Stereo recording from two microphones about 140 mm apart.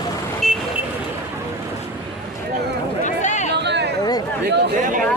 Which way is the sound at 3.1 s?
60° left (ahead or behind).